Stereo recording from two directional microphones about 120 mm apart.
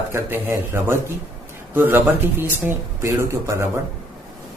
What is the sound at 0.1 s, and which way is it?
Speech, 20° right (ahead or behind).